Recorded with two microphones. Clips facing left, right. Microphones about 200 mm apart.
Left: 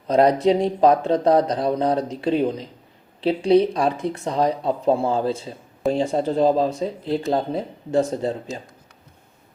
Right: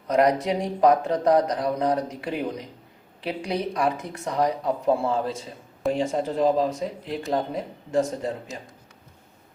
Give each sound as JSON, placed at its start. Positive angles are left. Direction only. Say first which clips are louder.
{"t": 0.1, "sound": "speech", "louder": "left 5 dB", "side_deg": 30}